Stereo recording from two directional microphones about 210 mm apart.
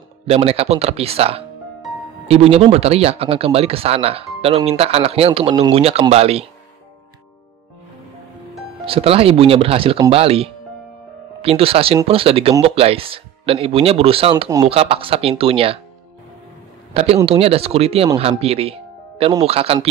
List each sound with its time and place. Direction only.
0.3 s speech: 30° right (ahead or behind)
8.8 s speech: 25° right (ahead or behind)
16.9 s speech: 30° right (ahead or behind)